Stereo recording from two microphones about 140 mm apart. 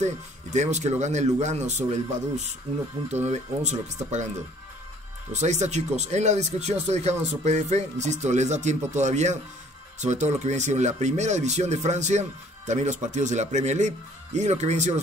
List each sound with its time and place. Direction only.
0.0 s speech: 55° right (ahead or behind)
5.3 s speech: 55° right (ahead or behind)